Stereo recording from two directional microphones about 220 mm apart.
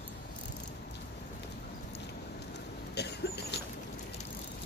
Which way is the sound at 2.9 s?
50° left (ahead or behind).